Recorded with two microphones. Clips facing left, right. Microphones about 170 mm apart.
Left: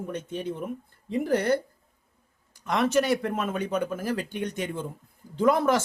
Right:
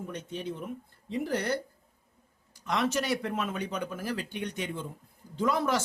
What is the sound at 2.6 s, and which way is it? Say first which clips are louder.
Speech: left 5 dB; 55° left (ahead or behind).